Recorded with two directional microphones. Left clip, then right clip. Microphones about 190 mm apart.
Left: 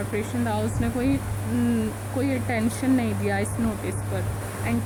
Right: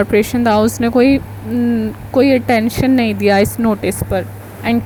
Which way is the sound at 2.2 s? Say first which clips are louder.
Right 15 dB; 40° right (ahead or behind).